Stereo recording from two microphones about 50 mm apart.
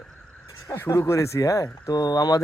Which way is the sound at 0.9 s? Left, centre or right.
Left.